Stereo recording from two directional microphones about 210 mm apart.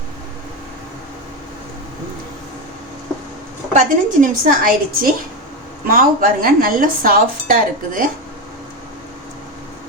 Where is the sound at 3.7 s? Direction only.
40° right (ahead or behind).